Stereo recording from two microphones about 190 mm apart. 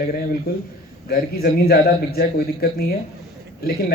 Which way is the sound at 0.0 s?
50° left (ahead or behind).